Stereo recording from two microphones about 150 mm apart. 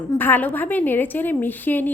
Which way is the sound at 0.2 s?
15° left (ahead or behind).